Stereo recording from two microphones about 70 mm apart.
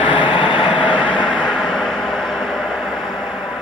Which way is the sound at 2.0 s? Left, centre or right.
Centre.